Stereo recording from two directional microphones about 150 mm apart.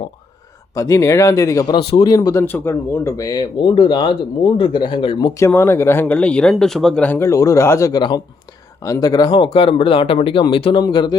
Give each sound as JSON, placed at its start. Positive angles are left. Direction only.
{"t": 0.7, "sound": "speech", "side_deg": 20}
{"t": 2.4, "sound": "speech", "side_deg": 15}
{"t": 5.4, "sound": "speech", "side_deg": 15}